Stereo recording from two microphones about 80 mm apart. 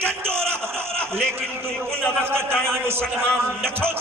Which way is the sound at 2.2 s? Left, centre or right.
Right.